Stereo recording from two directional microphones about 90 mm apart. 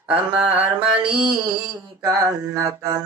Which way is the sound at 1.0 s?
70° right (ahead or behind).